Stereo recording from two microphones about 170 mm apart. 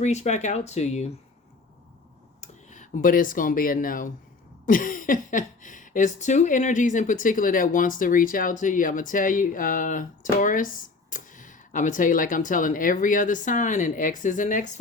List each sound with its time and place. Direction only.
0.0 s speech: 40° left (ahead or behind)
2.4 s speech: 45° left (ahead or behind)